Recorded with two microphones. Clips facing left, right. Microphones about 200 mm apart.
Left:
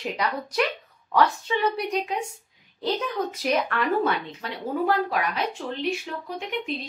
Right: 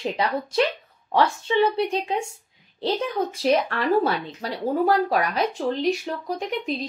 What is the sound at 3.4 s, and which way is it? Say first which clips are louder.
A woman's voice: right 4 dB; 30° right (ahead or behind).